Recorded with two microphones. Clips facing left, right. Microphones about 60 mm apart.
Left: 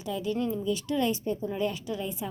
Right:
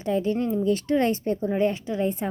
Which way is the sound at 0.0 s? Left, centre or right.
Right.